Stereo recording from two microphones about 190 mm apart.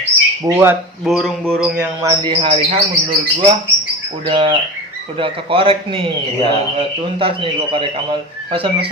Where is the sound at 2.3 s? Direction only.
30° right (ahead or behind).